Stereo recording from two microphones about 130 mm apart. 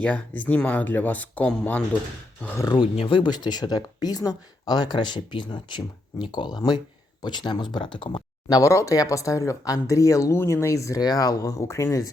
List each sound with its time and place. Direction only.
0.0 s speech: 10° left (ahead or behind)
2.7 s speech: 45° left (ahead or behind); by 12.1 s 25° left (ahead or behind)